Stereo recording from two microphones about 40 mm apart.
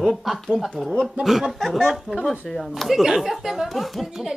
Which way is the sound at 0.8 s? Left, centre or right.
Right.